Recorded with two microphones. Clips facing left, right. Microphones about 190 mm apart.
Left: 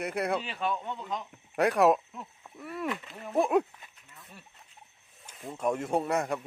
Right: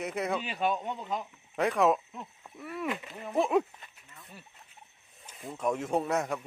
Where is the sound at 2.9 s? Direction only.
15° right (ahead or behind).